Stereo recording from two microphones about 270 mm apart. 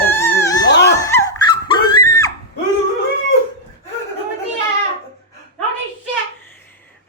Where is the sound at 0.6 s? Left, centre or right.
Left.